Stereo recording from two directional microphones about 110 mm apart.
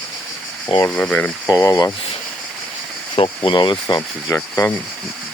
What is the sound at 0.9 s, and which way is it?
Speech, 10° left (ahead or behind).